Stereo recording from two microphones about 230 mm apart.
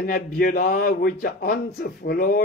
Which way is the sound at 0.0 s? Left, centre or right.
Left.